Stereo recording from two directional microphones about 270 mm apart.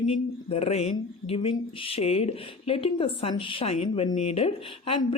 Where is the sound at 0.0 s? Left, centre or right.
Left.